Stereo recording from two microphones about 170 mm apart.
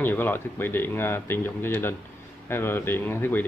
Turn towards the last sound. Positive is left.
turn(degrees=10)  # may be behind; listen again after turning